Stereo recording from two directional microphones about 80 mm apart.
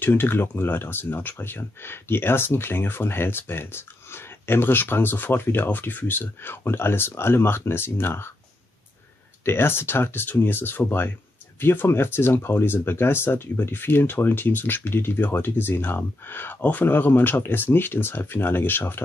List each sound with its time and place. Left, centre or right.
0.0 s speech: left
9.4 s speech: left